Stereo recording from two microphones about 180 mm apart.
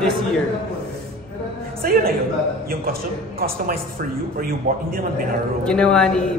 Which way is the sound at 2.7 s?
55° right (ahead or behind).